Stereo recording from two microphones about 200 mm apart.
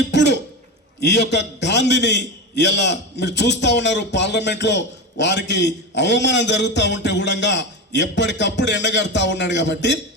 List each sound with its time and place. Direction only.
0.1 s cough: 60° left (ahead or behind)
1.0 s a man's voice: 60° left (ahead or behind)